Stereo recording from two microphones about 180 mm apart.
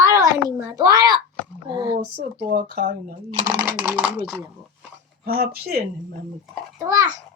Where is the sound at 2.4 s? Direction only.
55° right (ahead or behind).